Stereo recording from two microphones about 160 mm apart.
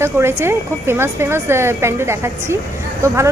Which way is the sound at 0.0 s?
15° right (ahead or behind).